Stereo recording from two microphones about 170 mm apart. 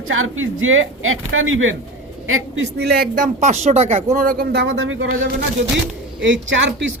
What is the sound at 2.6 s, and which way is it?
Speech, 75° right (ahead or behind).